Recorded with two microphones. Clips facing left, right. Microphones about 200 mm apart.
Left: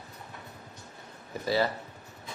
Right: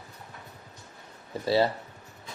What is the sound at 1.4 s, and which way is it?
Speech, 30° right (ahead or behind).